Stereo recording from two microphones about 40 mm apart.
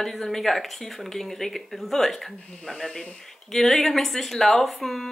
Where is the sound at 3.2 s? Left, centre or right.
Centre.